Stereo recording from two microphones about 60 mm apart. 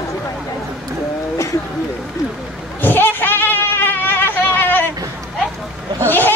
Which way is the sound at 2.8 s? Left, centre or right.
Left.